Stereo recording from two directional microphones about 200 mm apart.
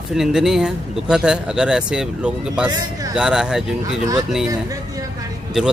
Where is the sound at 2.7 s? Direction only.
20° right (ahead or behind).